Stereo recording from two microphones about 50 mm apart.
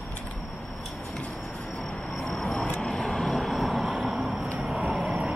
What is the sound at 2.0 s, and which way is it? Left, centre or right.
Train, centre.